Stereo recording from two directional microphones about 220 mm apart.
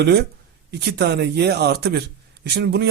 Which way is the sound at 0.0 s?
45° right (ahead or behind).